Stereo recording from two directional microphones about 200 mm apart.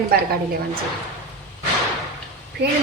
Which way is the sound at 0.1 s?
50° right (ahead or behind).